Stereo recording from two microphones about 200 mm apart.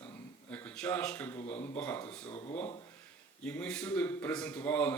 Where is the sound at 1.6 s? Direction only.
10° left (ahead or behind).